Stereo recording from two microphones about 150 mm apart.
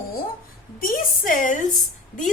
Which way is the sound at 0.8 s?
65° left (ahead or behind).